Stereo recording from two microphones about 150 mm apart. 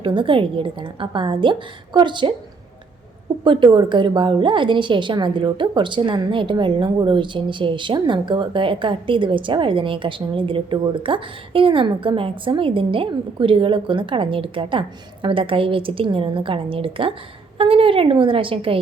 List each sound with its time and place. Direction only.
0.0 s a woman's voice: 35° right (ahead or behind)
3.4 s a woman's voice: 35° right (ahead or behind)